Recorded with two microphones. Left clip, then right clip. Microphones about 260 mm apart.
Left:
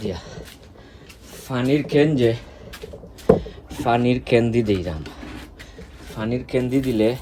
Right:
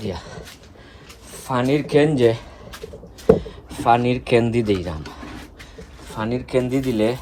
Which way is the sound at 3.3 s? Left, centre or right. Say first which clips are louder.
Right 1 dB; right.